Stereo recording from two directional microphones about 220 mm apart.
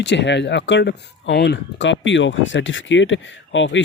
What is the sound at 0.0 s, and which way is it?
Speech, 55° left (ahead or behind).